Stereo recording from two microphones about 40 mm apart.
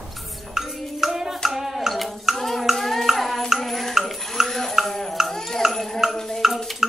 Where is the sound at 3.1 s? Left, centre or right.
Centre.